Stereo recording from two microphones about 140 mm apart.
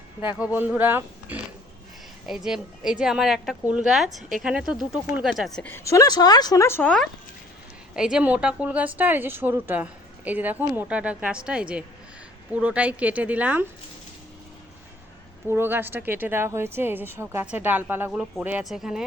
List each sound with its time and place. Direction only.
0.2 s a woman's voice: 10° right (ahead or behind); by 5.7 s 5° left (ahead or behind)
5.7 s speech: 20° left (ahead or behind)
7.9 s a woman's voice: 5° right (ahead or behind)
15.4 s a woman's voice: 15° right (ahead or behind)